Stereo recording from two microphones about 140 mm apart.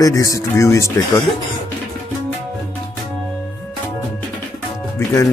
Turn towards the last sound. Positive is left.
turn(degrees=20)  # may be behind; listen again after turning